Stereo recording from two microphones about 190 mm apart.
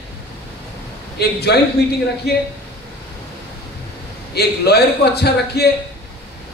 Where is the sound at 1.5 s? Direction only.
60° left (ahead or behind).